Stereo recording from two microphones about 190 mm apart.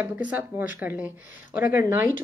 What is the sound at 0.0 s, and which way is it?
Speech, 10° right (ahead or behind).